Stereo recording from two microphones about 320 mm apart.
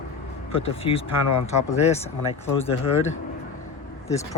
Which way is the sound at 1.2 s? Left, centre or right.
Left.